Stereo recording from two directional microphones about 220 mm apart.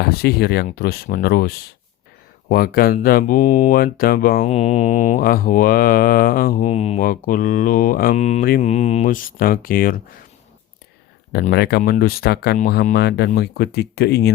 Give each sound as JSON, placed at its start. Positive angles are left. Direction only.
{"t": 0.0, "sound": "speech", "side_deg": 45}
{"t": 2.5, "sound": "mantra", "side_deg": 40}
{"t": 4.5, "sound": "mantra", "side_deg": 30}
{"t": 11.3, "sound": "speech", "side_deg": 45}